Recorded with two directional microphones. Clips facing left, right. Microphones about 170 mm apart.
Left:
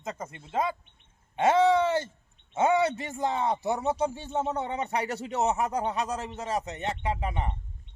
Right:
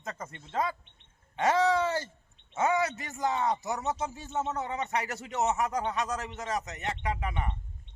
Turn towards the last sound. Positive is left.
turn(degrees=30)  # may be behind; listen again after turning